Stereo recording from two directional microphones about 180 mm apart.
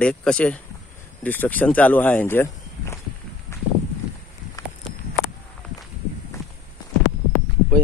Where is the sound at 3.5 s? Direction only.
15° left (ahead or behind).